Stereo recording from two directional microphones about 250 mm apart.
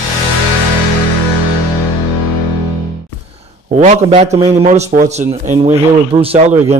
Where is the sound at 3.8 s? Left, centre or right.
Right.